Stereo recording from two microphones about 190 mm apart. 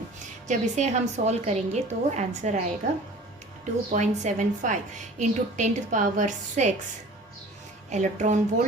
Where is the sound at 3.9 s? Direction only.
40° right (ahead or behind).